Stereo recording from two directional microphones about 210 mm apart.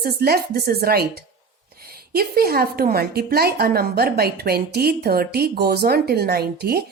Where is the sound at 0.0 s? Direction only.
50° right (ahead or behind).